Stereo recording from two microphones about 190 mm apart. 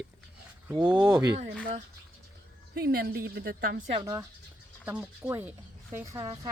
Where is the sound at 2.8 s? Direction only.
55° right (ahead or behind).